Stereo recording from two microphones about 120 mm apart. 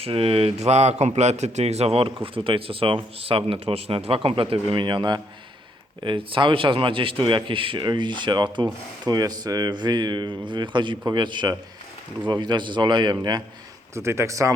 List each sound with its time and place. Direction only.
0.0 s a man's voice: 50° right (ahead or behind)
13.9 s a man's voice: 20° right (ahead or behind)